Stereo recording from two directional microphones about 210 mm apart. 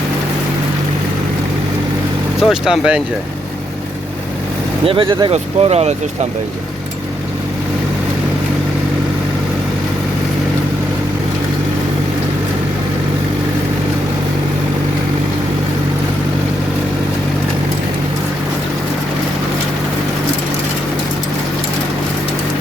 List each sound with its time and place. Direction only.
2.4 s speech: 5° right (ahead or behind)
4.9 s speech: 25° right (ahead or behind)